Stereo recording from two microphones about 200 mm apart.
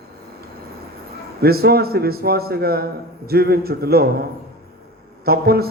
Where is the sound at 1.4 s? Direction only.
50° right (ahead or behind).